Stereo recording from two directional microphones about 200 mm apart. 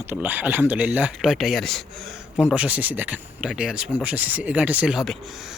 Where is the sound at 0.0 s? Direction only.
10° right (ahead or behind).